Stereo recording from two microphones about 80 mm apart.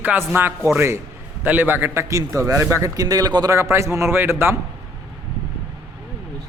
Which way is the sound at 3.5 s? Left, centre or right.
Right.